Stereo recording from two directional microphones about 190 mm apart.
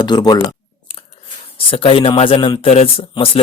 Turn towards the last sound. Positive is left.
turn(degrees=30)  # may be behind; listen again after turning